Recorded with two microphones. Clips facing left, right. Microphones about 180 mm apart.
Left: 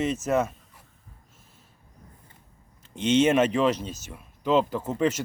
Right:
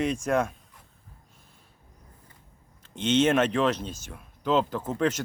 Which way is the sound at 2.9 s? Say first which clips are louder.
Left 2 dB; 10° left (ahead or behind).